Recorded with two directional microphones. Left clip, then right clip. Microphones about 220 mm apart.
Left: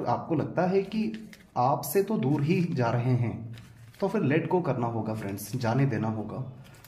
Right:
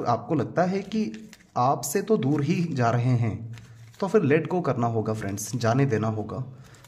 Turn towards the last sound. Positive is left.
turn(degrees=-40)  # may be behind; listen again after turning